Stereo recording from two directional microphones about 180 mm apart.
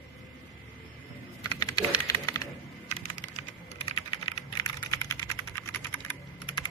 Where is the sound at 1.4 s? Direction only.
20° left (ahead or behind).